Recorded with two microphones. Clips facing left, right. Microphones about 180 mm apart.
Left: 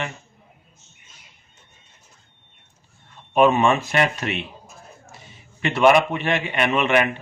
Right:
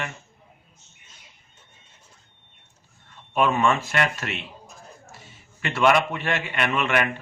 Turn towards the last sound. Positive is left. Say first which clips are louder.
# left 4 dB
turn(degrees=20)  # may be behind; listen again after turning